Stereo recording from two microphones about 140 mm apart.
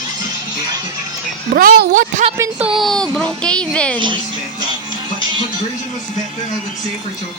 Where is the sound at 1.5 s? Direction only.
90° right; by 2.2 s 75° right (ahead or behind).